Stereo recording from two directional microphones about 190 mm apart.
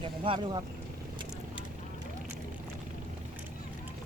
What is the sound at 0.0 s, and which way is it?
Speech, 25° right (ahead or behind).